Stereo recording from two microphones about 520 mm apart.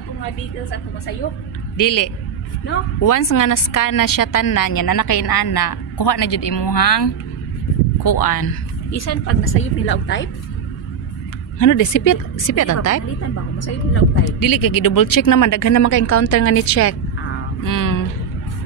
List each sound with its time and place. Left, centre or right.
1.8 s a woman's voice: left
8.9 s a woman's voice: left
11.5 s speech: left
14.2 s speech: left